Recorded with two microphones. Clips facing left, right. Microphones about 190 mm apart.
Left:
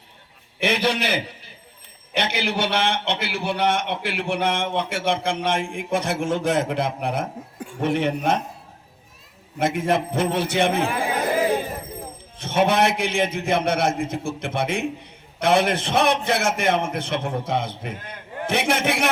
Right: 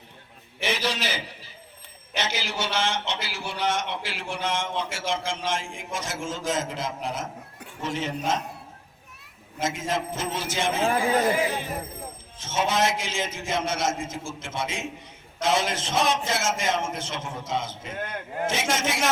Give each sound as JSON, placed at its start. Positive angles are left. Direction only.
{"t": 0.6, "sound": "a man's voice", "side_deg": 60}
{"t": 9.6, "sound": "a man's voice", "side_deg": 60}
{"t": 12.4, "sound": "a man's voice", "side_deg": 60}